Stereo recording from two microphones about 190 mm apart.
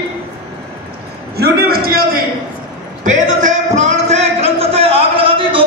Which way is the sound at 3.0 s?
40° right (ahead or behind).